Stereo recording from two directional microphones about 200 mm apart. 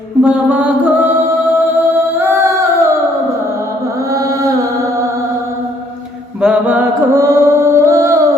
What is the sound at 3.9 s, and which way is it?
Music, 15° right (ahead or behind).